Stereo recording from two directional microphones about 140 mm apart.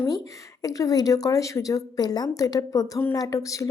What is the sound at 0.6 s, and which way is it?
A woman's voice, 25° left (ahead or behind).